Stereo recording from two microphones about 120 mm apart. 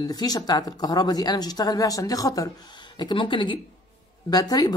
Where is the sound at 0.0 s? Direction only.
35° left (ahead or behind).